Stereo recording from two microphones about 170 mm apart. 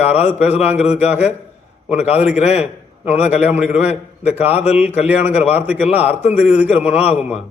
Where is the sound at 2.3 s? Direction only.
40° left (ahead or behind).